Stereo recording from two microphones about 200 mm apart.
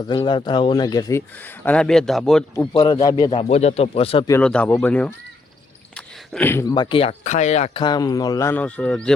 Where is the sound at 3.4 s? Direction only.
30° left (ahead or behind).